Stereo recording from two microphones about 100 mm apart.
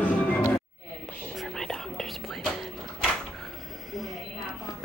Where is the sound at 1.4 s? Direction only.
5° left (ahead or behind).